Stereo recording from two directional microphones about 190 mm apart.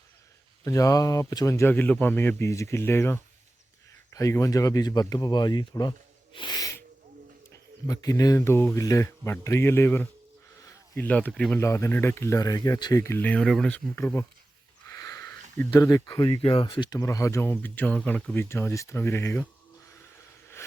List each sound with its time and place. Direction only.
0.6 s speech: 15° left (ahead or behind)
6.3 s sneeze: 25° left (ahead or behind)
7.9 s speech: 20° left (ahead or behind)
14.8 s a sound: 15° left (ahead or behind)
15.7 s speech: 20° left (ahead or behind)